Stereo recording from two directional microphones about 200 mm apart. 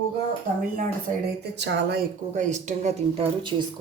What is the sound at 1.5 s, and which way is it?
Speech, 60° right (ahead or behind).